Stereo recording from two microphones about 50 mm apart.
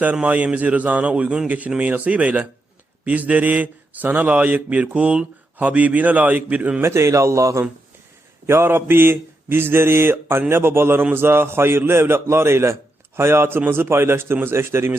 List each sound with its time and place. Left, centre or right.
0.0 s speech: right
6.8 s speech: right
8.4 s mantra: right
11.1 s a man's voice: right
13.7 s mantra: right
14.4 s a man's voice: right